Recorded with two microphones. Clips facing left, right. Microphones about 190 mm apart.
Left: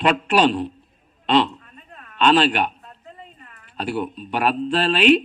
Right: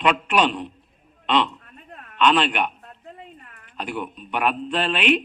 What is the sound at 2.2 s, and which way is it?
Speech, 35° left (ahead or behind).